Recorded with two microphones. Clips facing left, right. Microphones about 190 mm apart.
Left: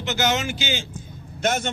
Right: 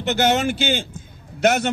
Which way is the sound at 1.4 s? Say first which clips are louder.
Right 6 dB; 65° right (ahead or behind).